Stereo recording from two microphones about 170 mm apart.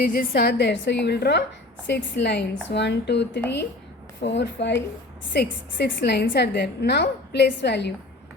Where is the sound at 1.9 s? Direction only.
90° left.